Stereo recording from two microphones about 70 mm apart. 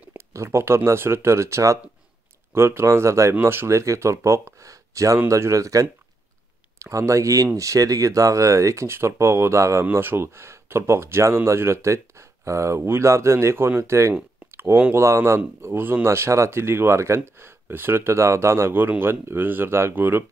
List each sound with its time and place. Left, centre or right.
0.1 s speech: right
9.8 s speech: right
14.5 s a sound: right
15.0 s speech: right